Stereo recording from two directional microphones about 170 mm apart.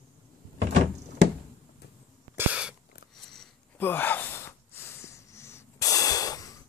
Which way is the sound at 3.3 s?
5° left (ahead or behind).